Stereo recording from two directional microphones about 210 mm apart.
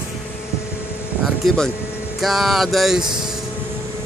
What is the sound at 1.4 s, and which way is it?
Music, 5° left (ahead or behind).